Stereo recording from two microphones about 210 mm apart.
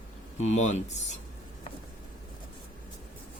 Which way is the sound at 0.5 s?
35° left (ahead or behind).